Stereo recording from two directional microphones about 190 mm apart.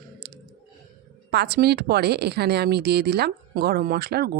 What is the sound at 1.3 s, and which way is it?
A woman's voice, 60° right (ahead or behind).